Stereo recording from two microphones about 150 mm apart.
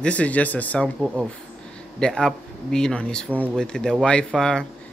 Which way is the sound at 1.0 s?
5° right (ahead or behind).